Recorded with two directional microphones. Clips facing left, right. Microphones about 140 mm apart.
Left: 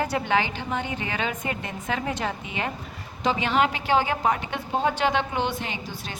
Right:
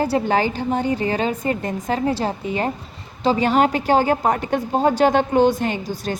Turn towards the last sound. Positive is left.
turn(degrees=-45)  # may be behind; listen again after turning